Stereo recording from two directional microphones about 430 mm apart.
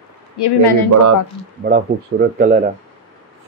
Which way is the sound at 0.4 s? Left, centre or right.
Left.